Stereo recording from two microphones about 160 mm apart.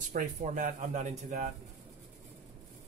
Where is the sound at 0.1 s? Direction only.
55° right (ahead or behind).